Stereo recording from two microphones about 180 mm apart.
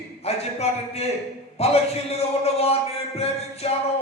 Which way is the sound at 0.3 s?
35° left (ahead or behind).